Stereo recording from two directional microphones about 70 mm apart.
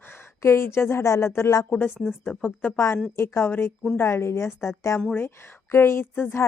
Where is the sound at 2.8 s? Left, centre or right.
Left.